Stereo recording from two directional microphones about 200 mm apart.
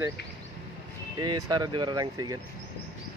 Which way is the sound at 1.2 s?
20° right (ahead or behind).